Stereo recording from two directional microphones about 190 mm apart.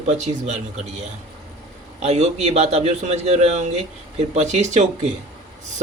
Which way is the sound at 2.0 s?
35° right (ahead or behind).